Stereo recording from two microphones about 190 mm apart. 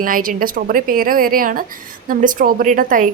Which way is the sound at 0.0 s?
45° right (ahead or behind).